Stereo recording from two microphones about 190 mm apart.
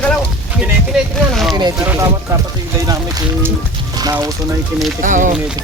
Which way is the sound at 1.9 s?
15° right (ahead or behind).